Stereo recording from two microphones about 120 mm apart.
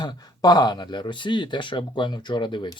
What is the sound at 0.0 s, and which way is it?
Speech, 35° left (ahead or behind).